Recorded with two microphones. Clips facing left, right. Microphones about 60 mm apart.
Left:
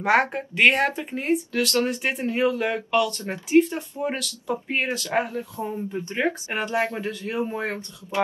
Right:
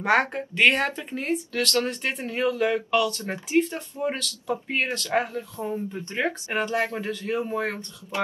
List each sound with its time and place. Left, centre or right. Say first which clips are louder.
0.0 s speech: left 1 dB; centre
4.9 s speech: left 1 dB; centre